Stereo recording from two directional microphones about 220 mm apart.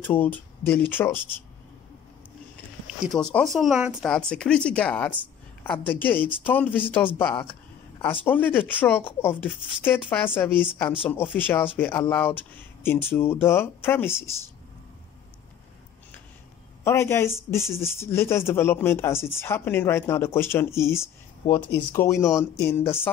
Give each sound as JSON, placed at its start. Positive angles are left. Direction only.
{"t": 0.0, "sound": "speech", "side_deg": 10}
{"t": 3.0, "sound": "a woman's voice", "side_deg": 0}
{"t": 16.8, "sound": "speech", "side_deg": 10}